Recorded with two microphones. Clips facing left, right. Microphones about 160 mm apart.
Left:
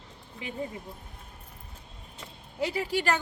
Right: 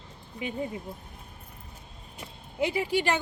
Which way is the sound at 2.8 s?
40° left (ahead or behind).